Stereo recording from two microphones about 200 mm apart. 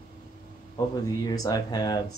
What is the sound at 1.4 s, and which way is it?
Speech, 20° left (ahead or behind).